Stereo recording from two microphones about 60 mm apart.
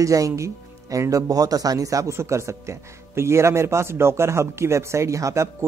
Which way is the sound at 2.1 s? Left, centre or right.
Right.